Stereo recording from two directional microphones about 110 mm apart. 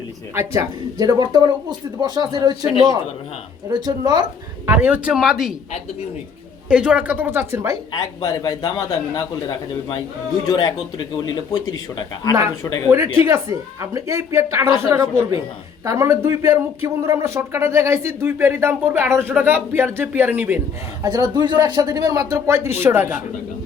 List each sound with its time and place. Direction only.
0.3 s speech: 30° right (ahead or behind)
4.6 s a woman's voice: 15° right (ahead or behind)
6.7 s a woman's voice: 10° right (ahead or behind)
7.9 s speech: 35° left (ahead or behind)
10.4 s speech: 35° left (ahead or behind)
13.2 s speech: 30° right (ahead or behind)
21.0 s speech: 35° right (ahead or behind); by 23.2 s 20° right (ahead or behind)